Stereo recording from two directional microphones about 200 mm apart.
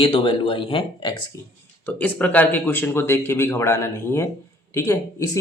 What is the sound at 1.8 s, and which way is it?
Speech, 5° left (ahead or behind).